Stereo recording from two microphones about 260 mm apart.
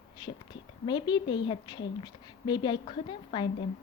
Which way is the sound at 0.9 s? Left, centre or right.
Centre.